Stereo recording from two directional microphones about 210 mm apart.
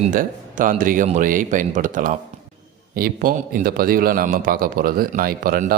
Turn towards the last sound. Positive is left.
turn(degrees=-45)  # may be behind; listen again after turning